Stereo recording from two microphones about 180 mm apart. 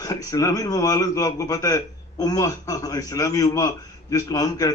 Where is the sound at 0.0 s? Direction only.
20° left (ahead or behind).